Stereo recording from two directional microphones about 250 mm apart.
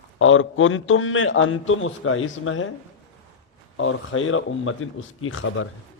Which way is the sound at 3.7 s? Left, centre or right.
Left.